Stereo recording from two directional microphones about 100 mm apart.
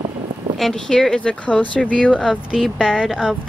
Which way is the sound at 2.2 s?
10° right (ahead or behind).